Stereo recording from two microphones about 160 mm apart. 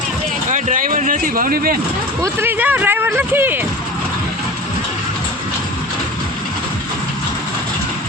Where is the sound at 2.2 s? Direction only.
15° right (ahead or behind).